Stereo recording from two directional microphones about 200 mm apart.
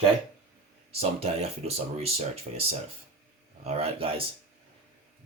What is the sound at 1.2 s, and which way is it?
Speech, 30° right (ahead or behind).